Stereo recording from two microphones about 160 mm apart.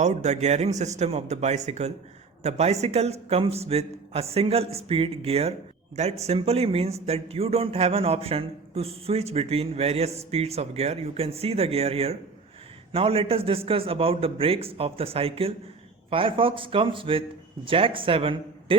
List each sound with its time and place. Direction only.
0.0 s speech: 45° right (ahead or behind)